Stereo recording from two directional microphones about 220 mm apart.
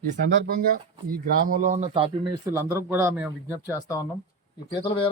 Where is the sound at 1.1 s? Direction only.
35° right (ahead or behind).